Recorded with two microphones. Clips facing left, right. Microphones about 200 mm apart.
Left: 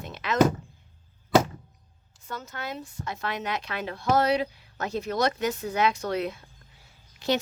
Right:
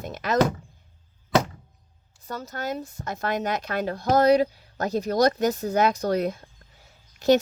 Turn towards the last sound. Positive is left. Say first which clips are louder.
# right 8 dB
turn(degrees=-45)  # may be behind; listen again after turning